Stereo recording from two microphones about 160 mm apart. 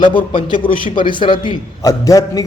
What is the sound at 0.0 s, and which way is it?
A man's voice, 30° left (ahead or behind).